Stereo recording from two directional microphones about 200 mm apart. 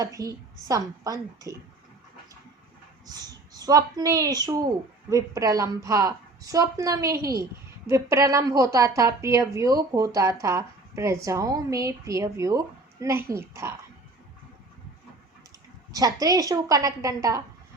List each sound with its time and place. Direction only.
0.0 s a woman's voice: 15° right (ahead or behind)
3.1 s a woman's voice: 20° right (ahead or behind)
15.9 s a woman's voice: 20° right (ahead or behind)